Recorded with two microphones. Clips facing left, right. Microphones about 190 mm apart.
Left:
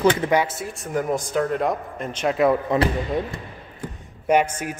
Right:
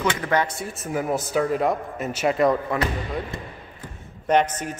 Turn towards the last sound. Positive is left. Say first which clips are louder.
# left 1 dB
turn(degrees=10)  # may be behind; listen again after turning